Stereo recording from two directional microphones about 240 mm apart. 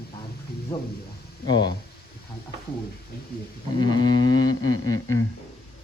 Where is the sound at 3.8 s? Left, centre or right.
Centre.